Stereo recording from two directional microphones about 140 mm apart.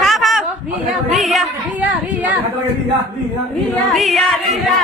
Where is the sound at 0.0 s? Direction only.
Centre (ahead or behind).